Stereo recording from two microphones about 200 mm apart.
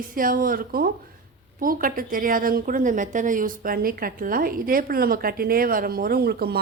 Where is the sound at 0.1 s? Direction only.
45° right (ahead or behind).